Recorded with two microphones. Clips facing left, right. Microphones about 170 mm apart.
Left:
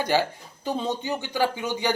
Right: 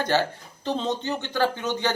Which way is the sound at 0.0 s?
10° left (ahead or behind).